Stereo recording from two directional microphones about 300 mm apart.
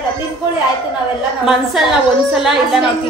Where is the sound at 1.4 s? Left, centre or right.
Centre.